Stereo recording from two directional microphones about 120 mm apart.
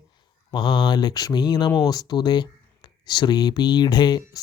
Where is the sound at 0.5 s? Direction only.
40° left (ahead or behind).